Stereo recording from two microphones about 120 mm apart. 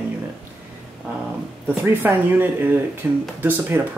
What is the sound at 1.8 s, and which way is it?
Speech, 15° right (ahead or behind).